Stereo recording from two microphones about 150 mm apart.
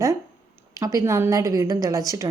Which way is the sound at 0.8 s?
20° right (ahead or behind).